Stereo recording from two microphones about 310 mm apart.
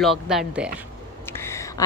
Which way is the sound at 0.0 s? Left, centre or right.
Centre.